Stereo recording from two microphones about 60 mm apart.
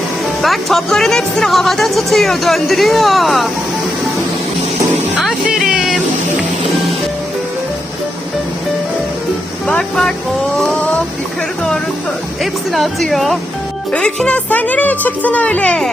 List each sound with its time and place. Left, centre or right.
0.4 s speech: centre
5.5 s music: centre
9.6 s vehicle: centre
12.4 s speech: centre
14.3 s speech: left